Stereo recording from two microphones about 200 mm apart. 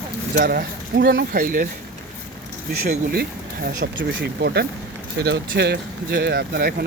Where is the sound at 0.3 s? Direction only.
50° right (ahead or behind).